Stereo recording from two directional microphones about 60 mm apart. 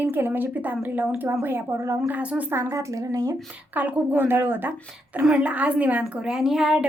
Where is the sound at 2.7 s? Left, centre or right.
Right.